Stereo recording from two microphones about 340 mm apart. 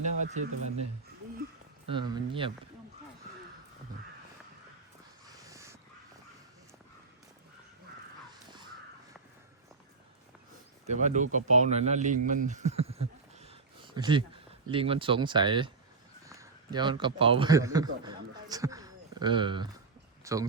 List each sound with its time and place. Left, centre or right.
0.0 s a sound: right
1.9 s speech: centre
5.5 s crow: centre
8.3 s crow: centre
10.8 s speech: right
13.4 s a sound: centre
14.7 s a man's voice: centre